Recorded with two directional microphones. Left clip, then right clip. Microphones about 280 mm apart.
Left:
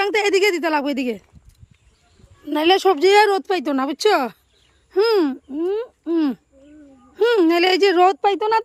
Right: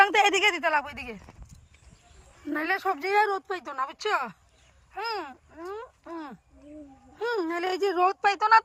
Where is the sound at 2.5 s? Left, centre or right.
Left.